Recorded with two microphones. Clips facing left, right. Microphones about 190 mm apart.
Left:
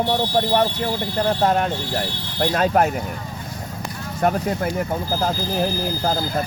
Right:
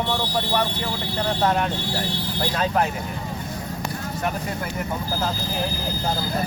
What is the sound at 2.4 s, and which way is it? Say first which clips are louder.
Speech: left 5 dB; 50° left (ahead or behind).